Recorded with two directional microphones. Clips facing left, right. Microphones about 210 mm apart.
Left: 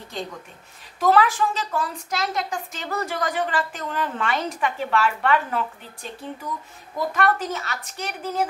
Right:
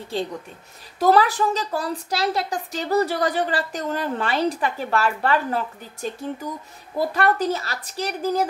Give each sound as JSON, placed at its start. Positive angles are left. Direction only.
{"t": 0.9, "sound": "a woman's voice", "side_deg": -35}